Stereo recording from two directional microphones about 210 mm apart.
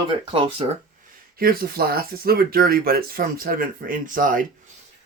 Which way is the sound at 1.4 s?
45° right (ahead or behind).